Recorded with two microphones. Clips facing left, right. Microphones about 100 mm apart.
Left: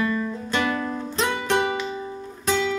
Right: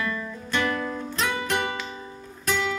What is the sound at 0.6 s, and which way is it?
Music, 15° left (ahead or behind).